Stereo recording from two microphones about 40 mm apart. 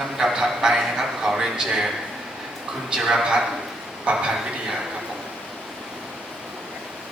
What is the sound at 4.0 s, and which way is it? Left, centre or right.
Speech, right.